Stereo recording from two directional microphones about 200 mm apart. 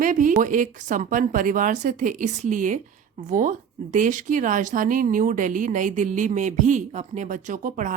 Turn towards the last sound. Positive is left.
turn(degrees=-40)  # may be behind; listen again after turning